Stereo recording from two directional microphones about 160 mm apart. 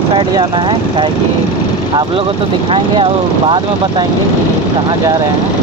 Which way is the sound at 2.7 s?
35° right (ahead or behind).